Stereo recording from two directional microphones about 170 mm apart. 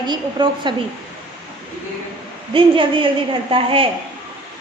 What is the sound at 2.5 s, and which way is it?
A woman's voice, 30° right (ahead or behind).